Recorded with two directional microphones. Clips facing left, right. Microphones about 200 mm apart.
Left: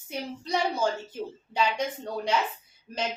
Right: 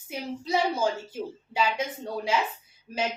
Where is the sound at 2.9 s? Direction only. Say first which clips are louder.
Right 2 dB; 5° right (ahead or behind).